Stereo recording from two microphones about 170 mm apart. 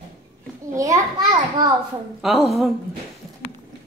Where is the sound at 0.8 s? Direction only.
20° right (ahead or behind).